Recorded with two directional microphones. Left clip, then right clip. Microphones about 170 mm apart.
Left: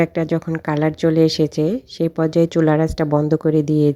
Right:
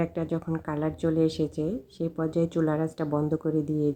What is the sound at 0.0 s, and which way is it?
Speech, 30° left (ahead or behind).